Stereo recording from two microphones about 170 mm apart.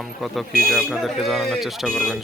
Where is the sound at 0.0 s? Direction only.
Centre (ahead or behind).